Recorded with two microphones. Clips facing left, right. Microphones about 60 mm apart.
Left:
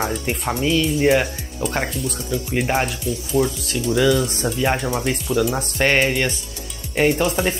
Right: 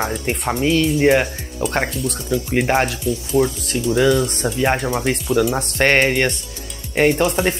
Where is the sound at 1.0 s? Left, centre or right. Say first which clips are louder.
Right 2 dB; right.